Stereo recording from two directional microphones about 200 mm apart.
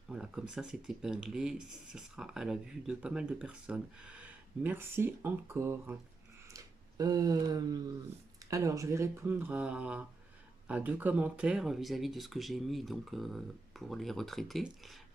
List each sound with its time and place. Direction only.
0.1 s speech: 5° right (ahead or behind)